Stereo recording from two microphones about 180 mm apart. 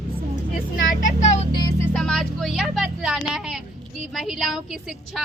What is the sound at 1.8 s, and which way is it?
A woman's voice, 5° left (ahead or behind).